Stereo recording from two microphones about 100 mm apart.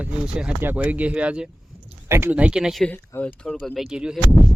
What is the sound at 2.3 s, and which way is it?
Speech, 10° right (ahead or behind).